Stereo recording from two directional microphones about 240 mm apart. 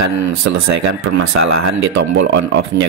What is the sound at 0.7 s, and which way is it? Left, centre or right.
Speech, right.